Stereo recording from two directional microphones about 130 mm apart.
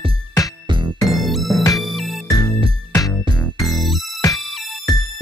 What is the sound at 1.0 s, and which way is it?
Music, centre (ahead or behind).